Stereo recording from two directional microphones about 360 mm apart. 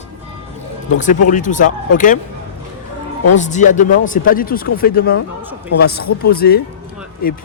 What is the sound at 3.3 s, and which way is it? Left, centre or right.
Speech, centre.